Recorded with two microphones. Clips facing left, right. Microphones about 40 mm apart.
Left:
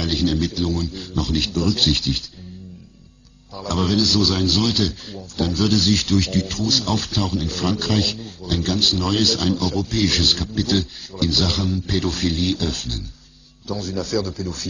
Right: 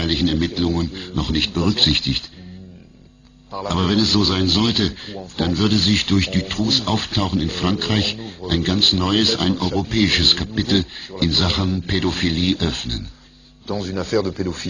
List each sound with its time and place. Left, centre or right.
0.0 s a man's voice: right
3.5 s a man's voice: right